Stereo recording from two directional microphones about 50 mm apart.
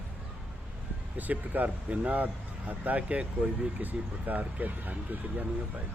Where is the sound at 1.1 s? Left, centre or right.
Right.